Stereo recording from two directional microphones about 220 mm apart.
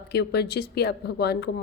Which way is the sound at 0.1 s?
50° left (ahead or behind).